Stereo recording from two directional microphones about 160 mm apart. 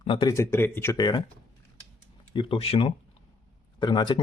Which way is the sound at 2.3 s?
35° left (ahead or behind).